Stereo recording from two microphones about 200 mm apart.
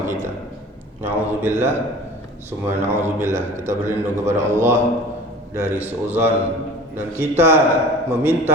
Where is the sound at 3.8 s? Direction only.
15° right (ahead or behind).